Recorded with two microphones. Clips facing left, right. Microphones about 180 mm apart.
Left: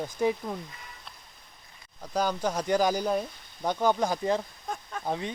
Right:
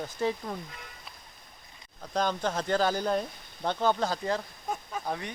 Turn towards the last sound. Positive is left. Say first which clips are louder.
# left 3 dB
turn(degrees=20)  # may be behind; listen again after turning